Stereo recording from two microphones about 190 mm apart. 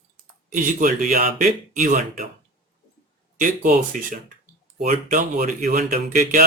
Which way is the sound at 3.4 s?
45° right (ahead or behind).